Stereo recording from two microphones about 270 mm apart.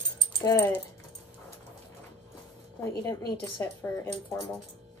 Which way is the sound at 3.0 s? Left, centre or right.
Centre.